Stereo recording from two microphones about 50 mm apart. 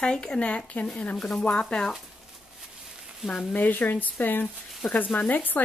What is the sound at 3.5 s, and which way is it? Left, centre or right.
Speech, left.